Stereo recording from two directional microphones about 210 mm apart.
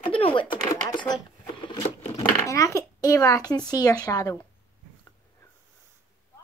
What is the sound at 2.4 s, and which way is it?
A child's voice, 15° left (ahead or behind).